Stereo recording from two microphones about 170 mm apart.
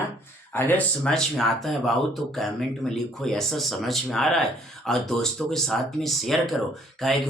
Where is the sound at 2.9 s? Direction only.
Centre (ahead or behind).